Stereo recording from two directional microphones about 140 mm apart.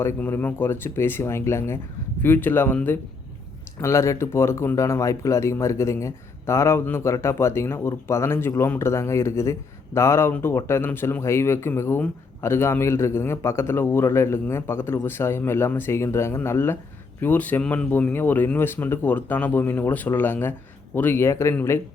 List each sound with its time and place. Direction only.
0.0 s speech: 15° left (ahead or behind)